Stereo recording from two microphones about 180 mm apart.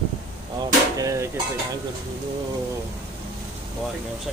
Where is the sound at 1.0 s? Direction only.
20° right (ahead or behind).